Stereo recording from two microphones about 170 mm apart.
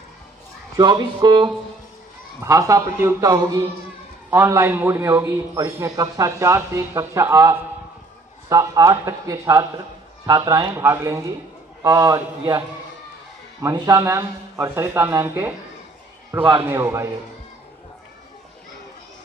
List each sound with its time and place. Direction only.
0.7 s a man's voice: 25° right (ahead or behind)